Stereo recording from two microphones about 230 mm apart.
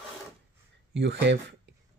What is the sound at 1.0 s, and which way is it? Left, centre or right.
Speech, right.